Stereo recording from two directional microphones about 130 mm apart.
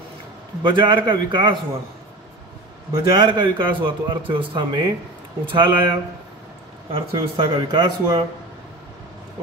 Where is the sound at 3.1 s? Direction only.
35° right (ahead or behind).